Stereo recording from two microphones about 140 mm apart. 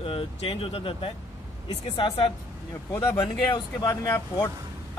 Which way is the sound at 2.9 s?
20° left (ahead or behind).